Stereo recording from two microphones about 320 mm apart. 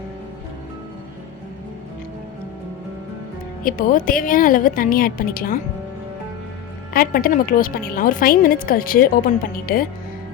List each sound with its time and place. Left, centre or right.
3.6 s a woman's voice: left
6.9 s a woman's voice: left